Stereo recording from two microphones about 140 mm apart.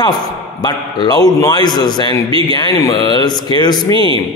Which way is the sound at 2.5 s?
30° left (ahead or behind).